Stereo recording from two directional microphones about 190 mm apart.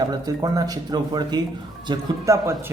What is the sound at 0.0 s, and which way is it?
A man's voice, 20° right (ahead or behind).